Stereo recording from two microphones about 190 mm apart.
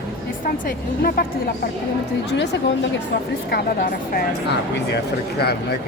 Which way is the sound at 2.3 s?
70° left (ahead or behind).